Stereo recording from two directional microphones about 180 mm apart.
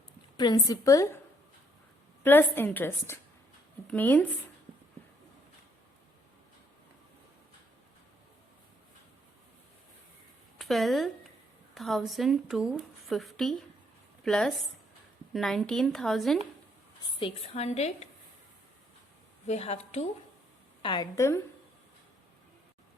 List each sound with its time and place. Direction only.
0.3 s a woman's voice: 25° left (ahead or behind)
2.2 s a woman's voice: 10° left (ahead or behind)
10.6 s a woman's voice: centre (ahead or behind)
17.2 s a woman's voice: 30° left (ahead or behind)
19.5 s a woman's voice: 35° left (ahead or behind)
20.8 s a woman's voice: 25° left (ahead or behind)